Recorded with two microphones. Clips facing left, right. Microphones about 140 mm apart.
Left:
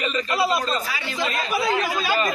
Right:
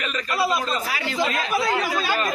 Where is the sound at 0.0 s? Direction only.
Centre (ahead or behind).